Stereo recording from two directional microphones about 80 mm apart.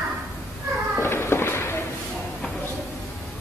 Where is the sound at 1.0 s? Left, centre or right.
Left.